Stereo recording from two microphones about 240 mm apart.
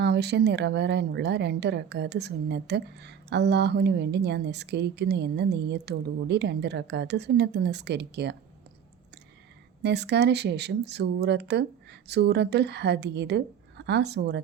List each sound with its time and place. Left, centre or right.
0.0 s speech: right
9.8 s speech: right